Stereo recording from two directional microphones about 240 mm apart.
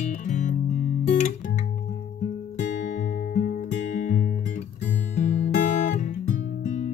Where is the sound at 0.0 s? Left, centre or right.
Left.